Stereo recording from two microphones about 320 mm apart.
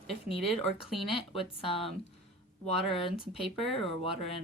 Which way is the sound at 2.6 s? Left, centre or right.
Centre.